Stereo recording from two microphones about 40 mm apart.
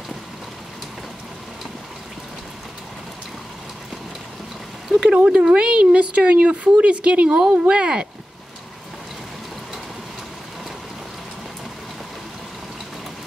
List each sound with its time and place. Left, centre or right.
5.0 s speech: right